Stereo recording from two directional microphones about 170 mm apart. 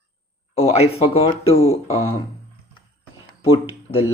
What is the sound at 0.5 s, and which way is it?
Speech, 35° left (ahead or behind).